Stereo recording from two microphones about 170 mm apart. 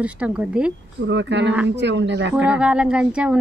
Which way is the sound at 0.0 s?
5° right (ahead or behind).